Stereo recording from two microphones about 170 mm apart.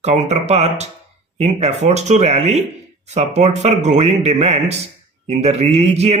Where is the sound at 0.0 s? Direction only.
40° right (ahead or behind).